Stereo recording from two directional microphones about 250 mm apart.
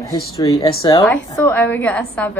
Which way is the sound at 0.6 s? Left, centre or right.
Centre.